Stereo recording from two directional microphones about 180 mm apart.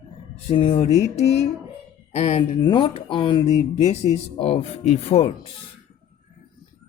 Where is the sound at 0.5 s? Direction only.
25° left (ahead or behind).